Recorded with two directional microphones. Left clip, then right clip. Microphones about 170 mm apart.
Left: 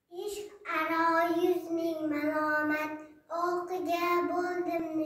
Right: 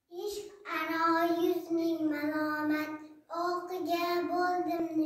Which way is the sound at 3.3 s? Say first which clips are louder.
Left 2 dB; 20° left (ahead or behind).